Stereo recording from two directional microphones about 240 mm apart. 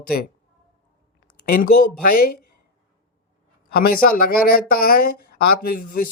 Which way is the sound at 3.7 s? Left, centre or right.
Left.